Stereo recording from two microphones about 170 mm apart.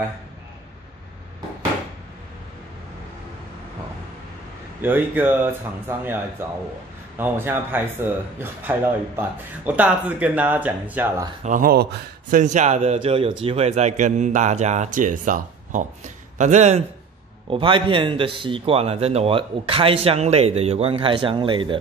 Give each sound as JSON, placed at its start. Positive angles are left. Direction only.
{"t": 4.8, "sound": "speech", "side_deg": -10}
{"t": 11.4, "sound": "speech", "side_deg": -55}
{"t": 12.4, "sound": "speech", "side_deg": -45}
{"t": 17.5, "sound": "speech", "side_deg": -30}